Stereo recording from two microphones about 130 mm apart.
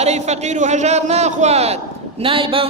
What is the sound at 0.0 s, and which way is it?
A man's voice, 60° right (ahead or behind).